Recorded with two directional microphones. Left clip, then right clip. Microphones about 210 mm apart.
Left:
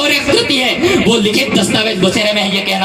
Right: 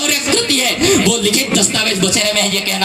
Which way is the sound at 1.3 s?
40° right (ahead or behind).